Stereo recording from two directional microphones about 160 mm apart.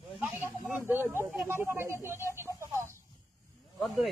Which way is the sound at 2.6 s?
15° right (ahead or behind).